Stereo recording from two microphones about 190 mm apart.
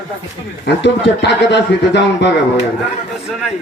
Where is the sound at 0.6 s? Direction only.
65° left (ahead or behind).